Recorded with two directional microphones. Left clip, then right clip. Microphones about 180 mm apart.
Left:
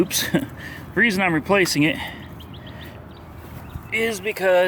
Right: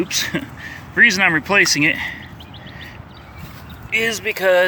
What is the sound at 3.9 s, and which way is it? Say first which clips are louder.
Speech: right 4 dB; 10° left (ahead or behind).